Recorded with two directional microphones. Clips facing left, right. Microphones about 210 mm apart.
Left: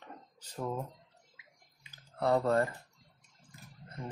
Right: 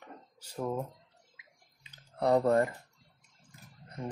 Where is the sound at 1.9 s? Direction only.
20° right (ahead or behind).